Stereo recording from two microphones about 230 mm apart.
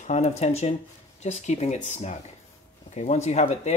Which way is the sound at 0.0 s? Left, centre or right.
Left.